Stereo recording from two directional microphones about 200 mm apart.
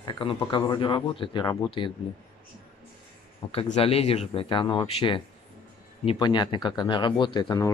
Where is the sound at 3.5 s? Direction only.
30° left (ahead or behind).